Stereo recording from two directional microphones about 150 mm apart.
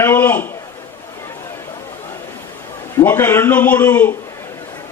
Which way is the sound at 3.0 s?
15° left (ahead or behind).